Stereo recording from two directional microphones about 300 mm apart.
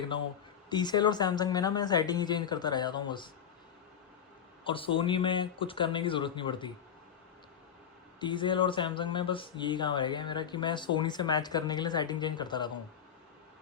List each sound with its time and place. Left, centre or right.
0.7 s speech: centre
4.6 s speech: centre
8.2 s speech: centre